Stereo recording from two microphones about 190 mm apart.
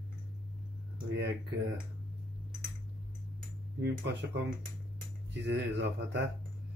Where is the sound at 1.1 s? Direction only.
65° right (ahead or behind).